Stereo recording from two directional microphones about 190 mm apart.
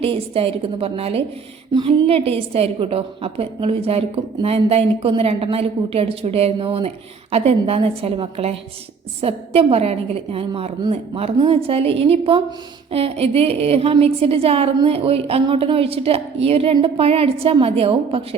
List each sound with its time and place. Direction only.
0.0 s a woman's voice: 30° right (ahead or behind)